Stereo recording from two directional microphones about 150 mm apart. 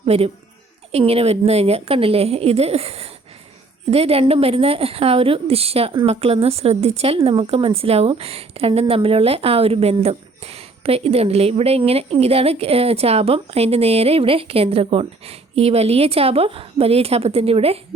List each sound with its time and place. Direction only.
0.0 s a woman's voice: 40° right (ahead or behind)